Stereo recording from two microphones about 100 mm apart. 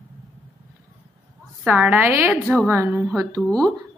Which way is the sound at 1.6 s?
15° right (ahead or behind).